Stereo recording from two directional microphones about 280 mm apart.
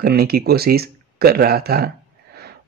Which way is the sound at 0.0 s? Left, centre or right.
Right.